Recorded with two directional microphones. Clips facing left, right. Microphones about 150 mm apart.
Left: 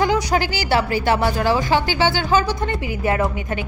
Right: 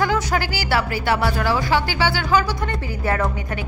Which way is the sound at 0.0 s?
20° left (ahead or behind).